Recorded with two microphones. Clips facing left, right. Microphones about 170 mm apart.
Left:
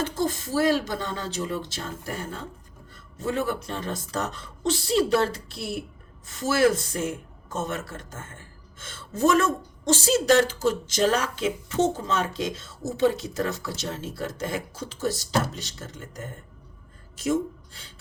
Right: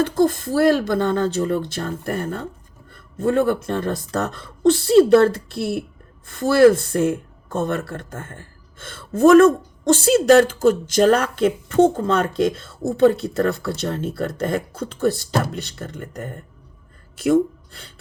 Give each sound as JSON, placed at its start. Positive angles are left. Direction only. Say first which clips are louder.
{"t": 0.0, "sound": "speech", "louder": "right 9 dB", "side_deg": -55}